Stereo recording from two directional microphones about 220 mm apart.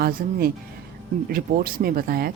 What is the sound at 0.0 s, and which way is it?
Speech, 45° right (ahead or behind).